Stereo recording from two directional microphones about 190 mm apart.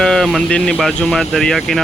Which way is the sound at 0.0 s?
5° left (ahead or behind).